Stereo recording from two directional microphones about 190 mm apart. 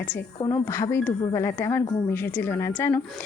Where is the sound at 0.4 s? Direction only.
15° left (ahead or behind).